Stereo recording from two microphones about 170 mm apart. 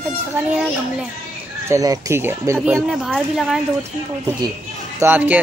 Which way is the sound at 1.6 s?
20° right (ahead or behind).